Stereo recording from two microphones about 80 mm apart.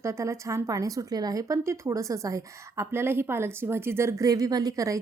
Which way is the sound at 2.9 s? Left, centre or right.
Right.